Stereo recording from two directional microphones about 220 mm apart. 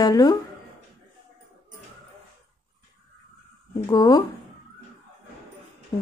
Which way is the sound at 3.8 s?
15° left (ahead or behind).